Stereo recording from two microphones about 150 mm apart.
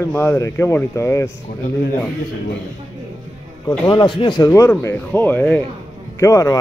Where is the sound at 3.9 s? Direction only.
35° left (ahead or behind).